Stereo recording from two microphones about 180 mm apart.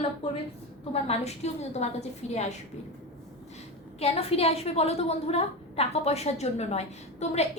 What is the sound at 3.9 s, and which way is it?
A woman's voice, 35° left (ahead or behind).